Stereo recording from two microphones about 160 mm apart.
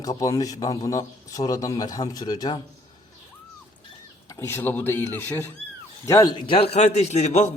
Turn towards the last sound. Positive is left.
turn(degrees=45)  # may be behind; listen again after turning